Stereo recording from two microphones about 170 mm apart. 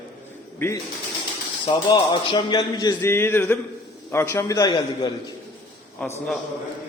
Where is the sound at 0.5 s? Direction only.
15° left (ahead or behind).